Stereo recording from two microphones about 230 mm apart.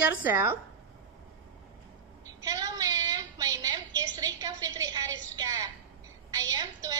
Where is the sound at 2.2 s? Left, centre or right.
Centre.